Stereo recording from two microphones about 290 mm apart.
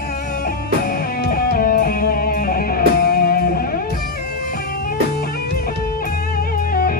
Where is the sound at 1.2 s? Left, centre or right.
Left.